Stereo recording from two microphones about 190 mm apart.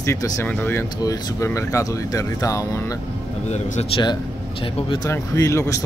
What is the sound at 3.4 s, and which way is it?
Speech, 35° left (ahead or behind).